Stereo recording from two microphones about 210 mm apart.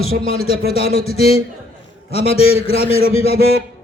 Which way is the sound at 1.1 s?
30° left (ahead or behind).